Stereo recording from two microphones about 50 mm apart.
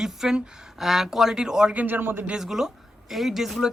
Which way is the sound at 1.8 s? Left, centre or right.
Right.